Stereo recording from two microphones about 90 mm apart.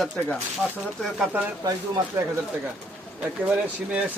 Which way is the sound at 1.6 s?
50° right (ahead or behind).